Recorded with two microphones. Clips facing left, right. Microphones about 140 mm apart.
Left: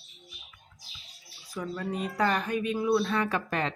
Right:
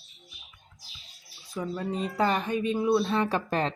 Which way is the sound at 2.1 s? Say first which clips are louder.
Right 1 dB; 25° right (ahead or behind).